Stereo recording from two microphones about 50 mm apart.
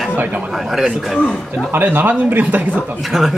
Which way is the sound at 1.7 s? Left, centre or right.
Right.